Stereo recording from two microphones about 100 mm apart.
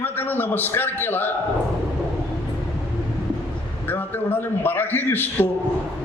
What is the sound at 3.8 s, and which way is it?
A man's voice, 20° left (ahead or behind).